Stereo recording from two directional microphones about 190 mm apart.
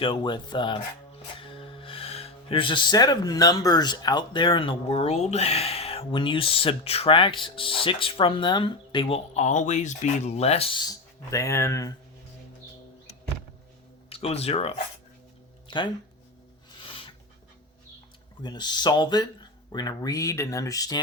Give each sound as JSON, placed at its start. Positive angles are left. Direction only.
{"t": 0.0, "sound": "speech", "side_deg": 25}
{"t": 14.1, "sound": "speech", "side_deg": 35}
{"t": 15.6, "sound": "a sound", "side_deg": 25}
{"t": 16.8, "sound": "filing", "side_deg": 25}
{"t": 18.4, "sound": "speech", "side_deg": 20}